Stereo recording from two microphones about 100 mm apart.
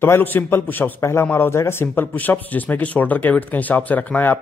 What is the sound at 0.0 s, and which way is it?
A man's voice, 20° left (ahead or behind).